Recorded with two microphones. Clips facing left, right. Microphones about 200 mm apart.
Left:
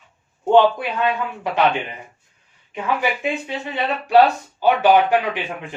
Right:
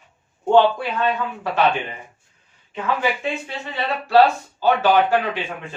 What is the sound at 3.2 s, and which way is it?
Speech, 15° left (ahead or behind).